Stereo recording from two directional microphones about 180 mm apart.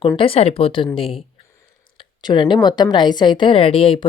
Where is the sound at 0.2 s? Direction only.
30° left (ahead or behind).